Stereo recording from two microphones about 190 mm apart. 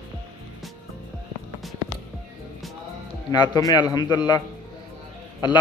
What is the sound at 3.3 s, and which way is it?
Speech, 20° left (ahead or behind).